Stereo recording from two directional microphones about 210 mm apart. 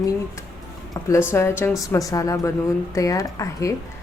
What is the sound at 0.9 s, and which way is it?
A woman's voice, 15° left (ahead or behind).